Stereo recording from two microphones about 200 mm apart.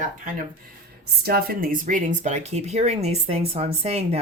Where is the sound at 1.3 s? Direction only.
50° right (ahead or behind); by 4.2 s 30° right (ahead or behind).